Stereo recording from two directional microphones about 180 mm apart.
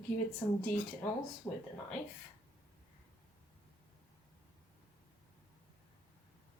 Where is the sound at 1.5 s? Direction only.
20° left (ahead or behind).